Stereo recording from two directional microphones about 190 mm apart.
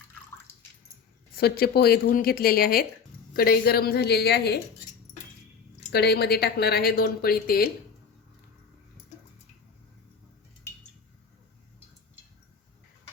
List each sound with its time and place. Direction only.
1.4 s a woman's voice: 55° left (ahead or behind)
5.9 s speech: 60° left (ahead or behind)